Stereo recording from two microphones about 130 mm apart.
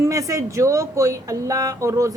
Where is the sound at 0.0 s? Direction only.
25° right (ahead or behind).